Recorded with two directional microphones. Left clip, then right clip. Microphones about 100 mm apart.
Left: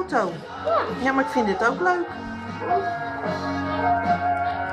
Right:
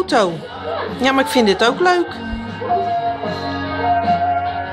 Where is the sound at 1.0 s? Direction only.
35° right (ahead or behind).